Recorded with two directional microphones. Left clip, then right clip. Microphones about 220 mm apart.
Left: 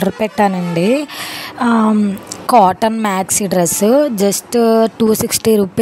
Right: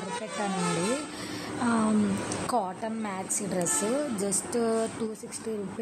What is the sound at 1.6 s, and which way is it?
Speech, 40° left (ahead or behind).